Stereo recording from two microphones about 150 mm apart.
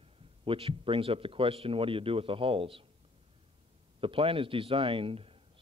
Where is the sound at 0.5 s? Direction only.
35° right (ahead or behind).